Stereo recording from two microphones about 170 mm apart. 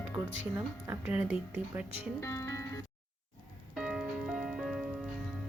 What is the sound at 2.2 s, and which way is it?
Music, 15° left (ahead or behind).